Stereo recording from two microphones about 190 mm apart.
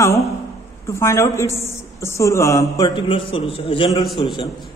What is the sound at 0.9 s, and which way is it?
A woman's voice, 15° left (ahead or behind).